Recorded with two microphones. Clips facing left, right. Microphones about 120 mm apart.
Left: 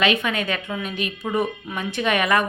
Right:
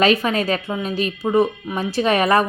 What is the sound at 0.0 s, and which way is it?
A woman's voice, 35° right (ahead or behind).